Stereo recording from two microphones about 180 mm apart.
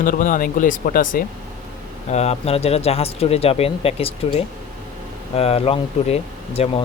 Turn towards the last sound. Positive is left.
turn(degrees=35)  # may be behind; listen again after turning